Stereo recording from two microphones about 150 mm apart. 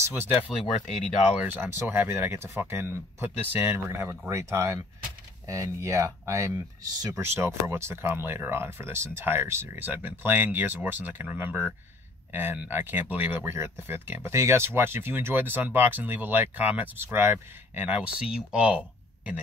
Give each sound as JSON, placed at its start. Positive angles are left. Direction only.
{"t": 0.0, "sound": "speech", "side_deg": -15}
{"t": 0.7, "sound": "speech", "side_deg": 50}
{"t": 1.3, "sound": "speech", "side_deg": -10}